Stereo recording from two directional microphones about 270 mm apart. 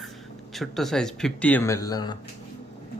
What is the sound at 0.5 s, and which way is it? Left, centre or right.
Speech, centre.